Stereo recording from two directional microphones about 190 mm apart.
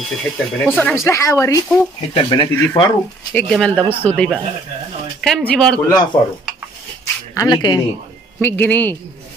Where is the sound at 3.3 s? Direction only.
5° left (ahead or behind).